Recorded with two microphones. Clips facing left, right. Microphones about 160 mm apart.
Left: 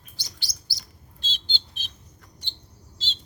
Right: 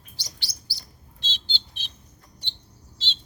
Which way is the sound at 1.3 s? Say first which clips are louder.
Even; 50° left (ahead or behind).